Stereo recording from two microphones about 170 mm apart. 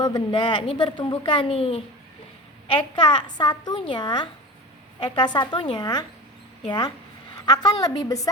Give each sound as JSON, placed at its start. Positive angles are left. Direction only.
{"t": 0.0, "sound": "a woman's voice", "side_deg": 25}